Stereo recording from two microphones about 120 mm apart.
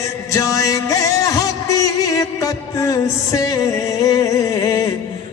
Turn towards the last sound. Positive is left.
turn(degrees=25)  # may be behind; listen again after turning